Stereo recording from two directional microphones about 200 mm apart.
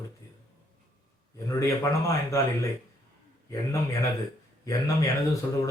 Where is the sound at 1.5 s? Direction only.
15° left (ahead or behind).